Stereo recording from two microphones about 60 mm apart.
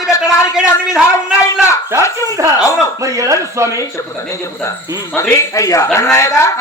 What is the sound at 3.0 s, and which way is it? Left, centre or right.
Speech, right.